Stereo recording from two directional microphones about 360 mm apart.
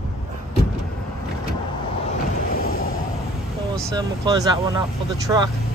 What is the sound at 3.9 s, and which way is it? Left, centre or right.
Speech, centre.